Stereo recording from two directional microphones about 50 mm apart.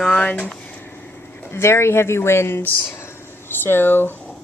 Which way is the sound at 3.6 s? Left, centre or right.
Left.